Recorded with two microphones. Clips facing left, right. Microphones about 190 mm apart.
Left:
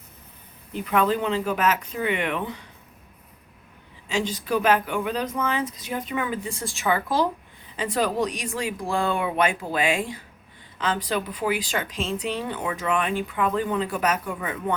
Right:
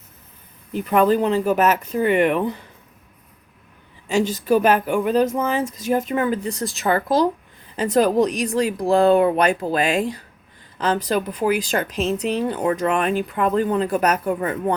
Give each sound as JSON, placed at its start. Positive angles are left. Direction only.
{"t": 0.9, "sound": "speech", "side_deg": -45}
{"t": 4.1, "sound": "speech", "side_deg": -45}